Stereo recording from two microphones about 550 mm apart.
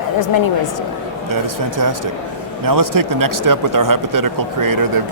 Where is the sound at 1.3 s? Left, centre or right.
Right.